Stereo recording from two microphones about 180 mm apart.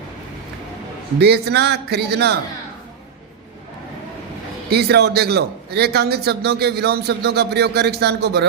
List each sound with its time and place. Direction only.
1.2 s speech: 65° right (ahead or behind)
4.7 s speech: 65° right (ahead or behind)